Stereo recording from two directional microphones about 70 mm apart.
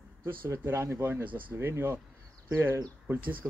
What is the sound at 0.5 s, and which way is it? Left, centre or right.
Speech, right.